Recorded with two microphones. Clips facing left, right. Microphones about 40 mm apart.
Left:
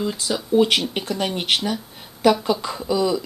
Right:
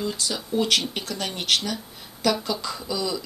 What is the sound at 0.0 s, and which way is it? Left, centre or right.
Speech, centre.